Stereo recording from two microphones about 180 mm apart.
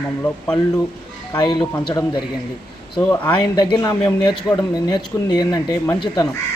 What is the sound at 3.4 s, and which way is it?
Speech, 25° left (ahead or behind).